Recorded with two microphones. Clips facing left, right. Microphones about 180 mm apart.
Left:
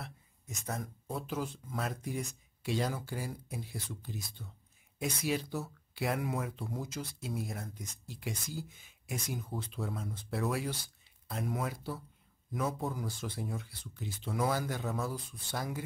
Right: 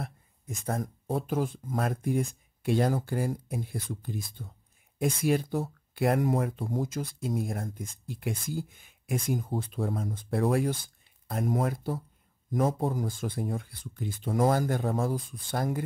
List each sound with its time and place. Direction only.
0.0 s speech: 50° right (ahead or behind)